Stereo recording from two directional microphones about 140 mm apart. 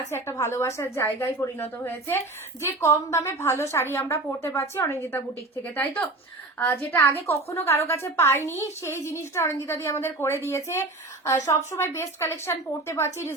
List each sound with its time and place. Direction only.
0.1 s a woman's voice: 20° left (ahead or behind)